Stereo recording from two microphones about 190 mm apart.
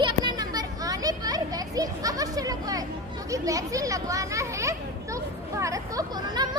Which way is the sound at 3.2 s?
15° right (ahead or behind).